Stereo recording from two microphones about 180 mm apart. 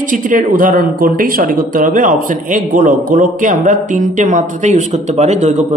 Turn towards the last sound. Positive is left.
turn(degrees=-40)  # may be behind; listen again after turning